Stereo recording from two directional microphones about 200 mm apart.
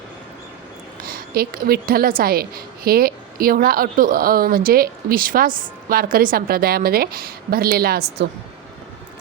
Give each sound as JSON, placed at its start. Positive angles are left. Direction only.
{"t": 1.0, "sound": "a woman's voice", "side_deg": -45}